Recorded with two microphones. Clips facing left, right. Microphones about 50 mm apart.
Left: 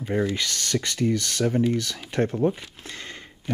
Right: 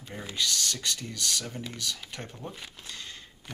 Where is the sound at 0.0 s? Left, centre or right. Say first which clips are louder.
Left 9 dB; left.